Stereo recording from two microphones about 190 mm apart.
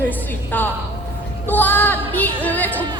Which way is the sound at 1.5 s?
10° left (ahead or behind).